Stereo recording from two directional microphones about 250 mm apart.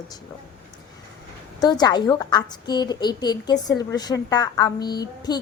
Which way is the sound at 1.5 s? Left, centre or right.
Centre.